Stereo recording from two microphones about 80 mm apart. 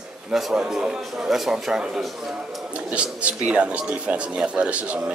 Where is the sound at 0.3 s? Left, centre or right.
Centre.